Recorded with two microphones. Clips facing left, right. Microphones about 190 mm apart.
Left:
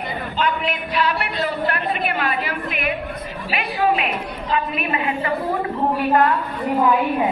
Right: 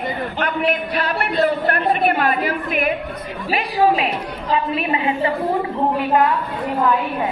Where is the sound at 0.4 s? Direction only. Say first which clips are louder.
Right 2 dB; 50° right (ahead or behind); by 5.3 s 25° right (ahead or behind).